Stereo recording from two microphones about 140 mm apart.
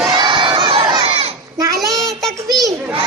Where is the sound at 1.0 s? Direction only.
45° right (ahead or behind).